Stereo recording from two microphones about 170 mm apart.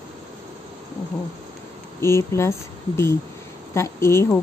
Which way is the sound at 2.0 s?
15° left (ahead or behind).